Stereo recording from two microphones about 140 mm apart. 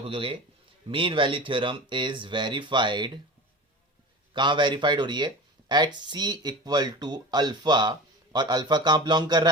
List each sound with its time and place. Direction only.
0.0 s speech: 40° right (ahead or behind)
4.4 s speech: 35° right (ahead or behind)